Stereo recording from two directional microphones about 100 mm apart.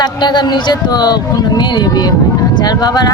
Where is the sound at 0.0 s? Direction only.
45° left (ahead or behind).